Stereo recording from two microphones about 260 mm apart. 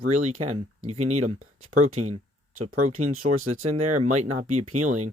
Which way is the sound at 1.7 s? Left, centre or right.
Right.